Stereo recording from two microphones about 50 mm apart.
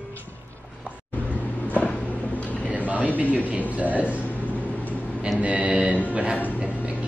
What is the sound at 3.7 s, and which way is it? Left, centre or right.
Mantra, right.